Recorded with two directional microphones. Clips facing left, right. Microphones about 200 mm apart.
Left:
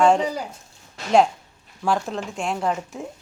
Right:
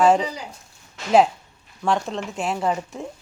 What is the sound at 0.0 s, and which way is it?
Speech, centre (ahead or behind).